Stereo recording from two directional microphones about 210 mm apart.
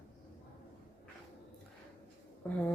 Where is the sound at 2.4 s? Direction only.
10° left (ahead or behind).